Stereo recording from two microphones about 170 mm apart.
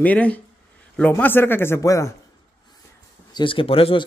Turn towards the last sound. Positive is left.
turn(degrees=35)  # may be behind; listen again after turning